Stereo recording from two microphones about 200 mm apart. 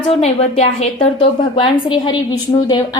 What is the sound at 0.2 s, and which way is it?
A woman's voice, 30° left (ahead or behind).